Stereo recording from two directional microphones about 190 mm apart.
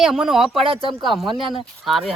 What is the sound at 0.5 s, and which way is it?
Speech, 30° right (ahead or behind).